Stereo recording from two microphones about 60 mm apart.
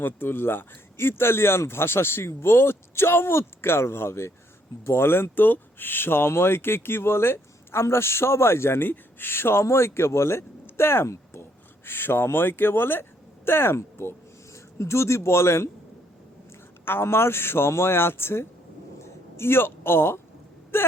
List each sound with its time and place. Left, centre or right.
0.0 s a man's voice: left
11.9 s speech: left
16.8 s speech: left